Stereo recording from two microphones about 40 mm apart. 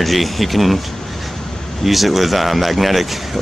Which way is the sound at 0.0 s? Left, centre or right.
Centre.